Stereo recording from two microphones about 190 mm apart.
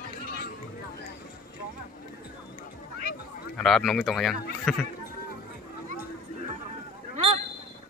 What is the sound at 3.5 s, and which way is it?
Speech, centre (ahead or behind).